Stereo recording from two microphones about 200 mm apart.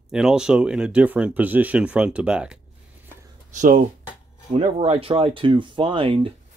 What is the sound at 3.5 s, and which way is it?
Speech, 40° right (ahead or behind).